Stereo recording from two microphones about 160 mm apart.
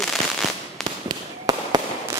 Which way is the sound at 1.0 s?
25° right (ahead or behind).